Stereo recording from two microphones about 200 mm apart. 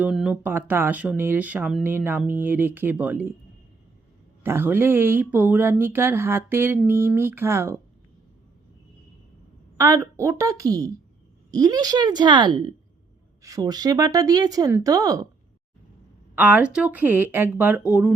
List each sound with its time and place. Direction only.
0.0 s speech: 5° right (ahead or behind)
4.4 s speech: 10° right (ahead or behind)
9.7 s a woman's voice: 15° right (ahead or behind)
16.3 s speech: 10° right (ahead or behind)